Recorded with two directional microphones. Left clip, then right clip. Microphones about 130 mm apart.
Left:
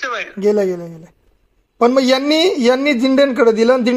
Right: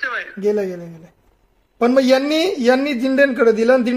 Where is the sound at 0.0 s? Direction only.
30° left (ahead or behind).